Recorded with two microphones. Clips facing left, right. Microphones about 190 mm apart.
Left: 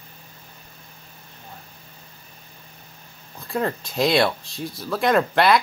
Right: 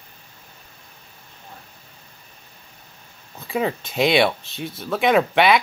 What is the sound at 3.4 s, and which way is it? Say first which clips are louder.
Speech: right 2 dB; centre (ahead or behind).